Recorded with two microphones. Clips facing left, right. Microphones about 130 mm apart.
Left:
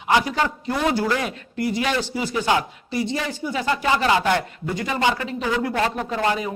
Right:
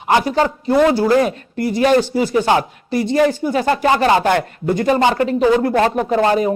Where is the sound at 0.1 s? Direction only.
40° right (ahead or behind).